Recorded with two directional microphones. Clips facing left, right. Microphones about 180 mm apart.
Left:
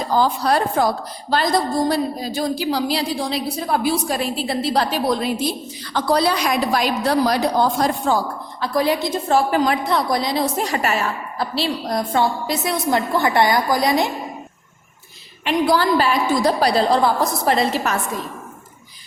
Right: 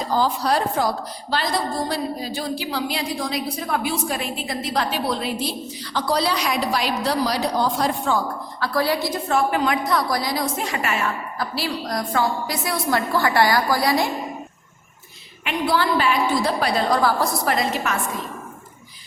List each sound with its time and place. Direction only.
0.2 s a woman's voice: 55° left (ahead or behind)
1.3 s a woman's voice: 45° left (ahead or behind)
5.8 s a woman's voice: 55° left (ahead or behind)
8.6 s a woman's voice: 20° left (ahead or behind)
15.4 s a woman's voice: 40° left (ahead or behind)